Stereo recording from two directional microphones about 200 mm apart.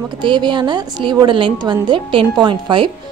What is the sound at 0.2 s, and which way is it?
A woman's voice, 25° right (ahead or behind).